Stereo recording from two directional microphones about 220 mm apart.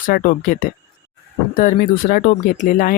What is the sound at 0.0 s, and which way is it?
Speech, 40° left (ahead or behind).